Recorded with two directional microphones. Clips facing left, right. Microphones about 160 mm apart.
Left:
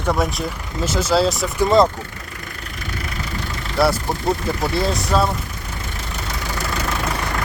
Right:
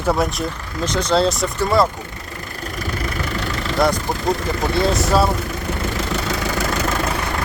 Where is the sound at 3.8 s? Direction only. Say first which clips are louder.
Left 1 dB; 5° left (ahead or behind).